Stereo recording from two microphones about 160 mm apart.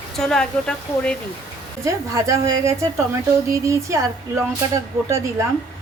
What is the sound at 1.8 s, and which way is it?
A woman's voice, 20° right (ahead or behind).